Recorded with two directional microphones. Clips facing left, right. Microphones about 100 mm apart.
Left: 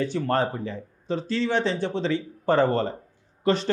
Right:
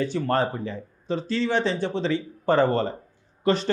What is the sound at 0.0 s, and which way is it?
Speech, 15° right (ahead or behind).